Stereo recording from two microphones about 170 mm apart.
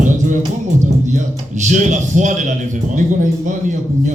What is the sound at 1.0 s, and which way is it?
A man's voice, 45° right (ahead or behind).